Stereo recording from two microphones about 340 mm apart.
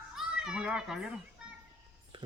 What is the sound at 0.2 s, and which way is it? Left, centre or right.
A child's voice, centre.